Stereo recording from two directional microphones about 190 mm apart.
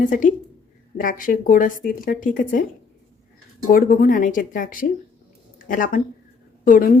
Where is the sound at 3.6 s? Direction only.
45° left (ahead or behind).